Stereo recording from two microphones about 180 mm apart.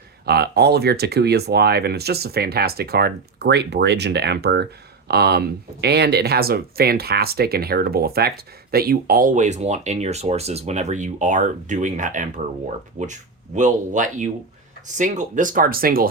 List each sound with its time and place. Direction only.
0.3 s speech: 65° right (ahead or behind)